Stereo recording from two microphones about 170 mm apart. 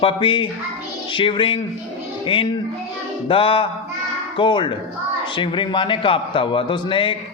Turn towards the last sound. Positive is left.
turn(degrees=30)  # may be behind; listen again after turning